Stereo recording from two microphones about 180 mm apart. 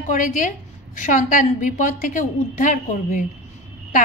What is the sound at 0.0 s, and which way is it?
A woman's voice, 45° left (ahead or behind).